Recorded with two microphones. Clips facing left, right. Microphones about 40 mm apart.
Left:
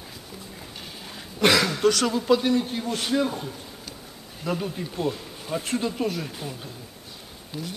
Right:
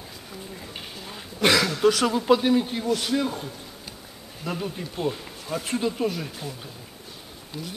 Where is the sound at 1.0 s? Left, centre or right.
Centre.